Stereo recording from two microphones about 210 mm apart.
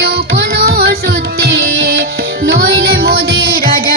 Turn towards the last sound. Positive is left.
turn(degrees=-45)  # may be behind; listen again after turning